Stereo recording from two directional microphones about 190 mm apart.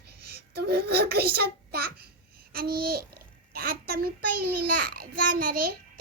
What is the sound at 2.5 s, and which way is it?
Babbling, 50° right (ahead or behind).